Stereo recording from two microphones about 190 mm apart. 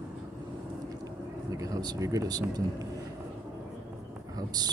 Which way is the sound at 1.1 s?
15° right (ahead or behind).